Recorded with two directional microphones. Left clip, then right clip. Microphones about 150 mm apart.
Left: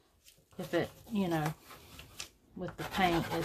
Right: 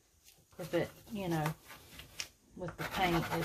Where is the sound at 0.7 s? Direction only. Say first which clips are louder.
Left 2 dB; 45° left (ahead or behind).